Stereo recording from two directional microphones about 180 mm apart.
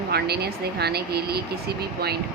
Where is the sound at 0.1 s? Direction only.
60° right (ahead or behind).